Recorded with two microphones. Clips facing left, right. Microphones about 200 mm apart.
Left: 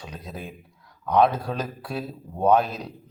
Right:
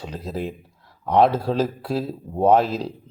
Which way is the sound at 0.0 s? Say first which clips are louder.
Right 8 dB; 30° right (ahead or behind).